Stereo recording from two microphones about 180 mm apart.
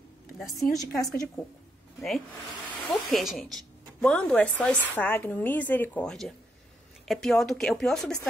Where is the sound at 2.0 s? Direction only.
Centre (ahead or behind).